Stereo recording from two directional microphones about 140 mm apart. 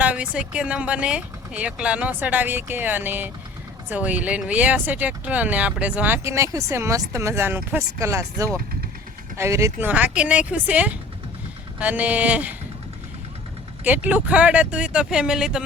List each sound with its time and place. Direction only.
0.0 s speech: 10° right (ahead or behind)
9.9 s speech: 10° right (ahead or behind)
13.8 s speech: 10° right (ahead or behind)